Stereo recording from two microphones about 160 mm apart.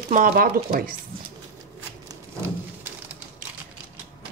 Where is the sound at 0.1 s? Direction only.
60° right (ahead or behind).